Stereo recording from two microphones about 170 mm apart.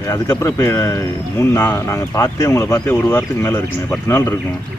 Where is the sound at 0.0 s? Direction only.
20° left (ahead or behind).